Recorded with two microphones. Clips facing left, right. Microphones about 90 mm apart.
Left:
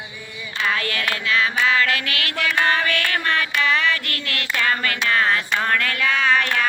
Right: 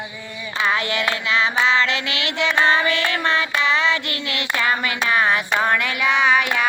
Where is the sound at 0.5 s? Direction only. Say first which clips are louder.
Right 3 dB; 20° right (ahead or behind).